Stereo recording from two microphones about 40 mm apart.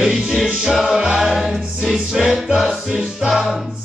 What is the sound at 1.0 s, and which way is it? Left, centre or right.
Music, centre.